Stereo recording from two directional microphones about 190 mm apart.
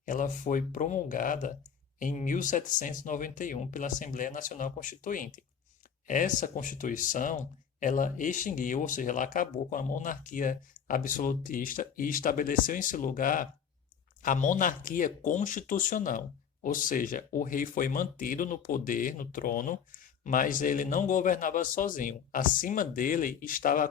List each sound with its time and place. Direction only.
0.0 s speech: 45° left (ahead or behind)